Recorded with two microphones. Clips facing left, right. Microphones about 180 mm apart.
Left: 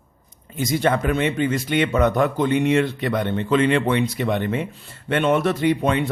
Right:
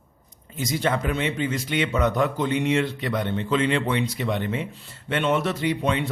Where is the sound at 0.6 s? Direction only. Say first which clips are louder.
Left 4 dB; 55° left (ahead or behind).